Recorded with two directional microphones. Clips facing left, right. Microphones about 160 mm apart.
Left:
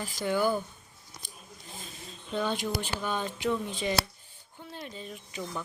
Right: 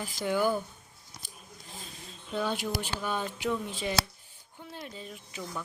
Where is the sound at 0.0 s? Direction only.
10° right (ahead or behind).